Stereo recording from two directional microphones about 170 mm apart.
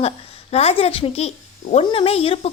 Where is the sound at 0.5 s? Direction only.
35° left (ahead or behind).